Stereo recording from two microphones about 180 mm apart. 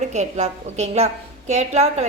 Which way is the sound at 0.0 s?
40° right (ahead or behind).